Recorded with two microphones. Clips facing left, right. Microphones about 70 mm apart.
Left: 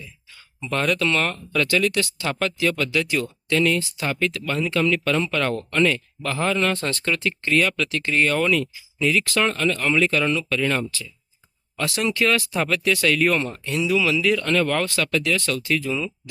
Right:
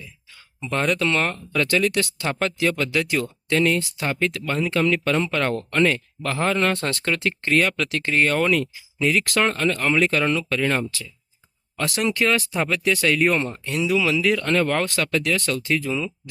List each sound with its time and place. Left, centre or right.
0.6 s speech: centre
12.2 s speech: right
15.9 s speech: centre